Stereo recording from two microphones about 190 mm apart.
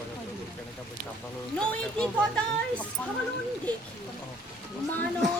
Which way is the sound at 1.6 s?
5° left (ahead or behind).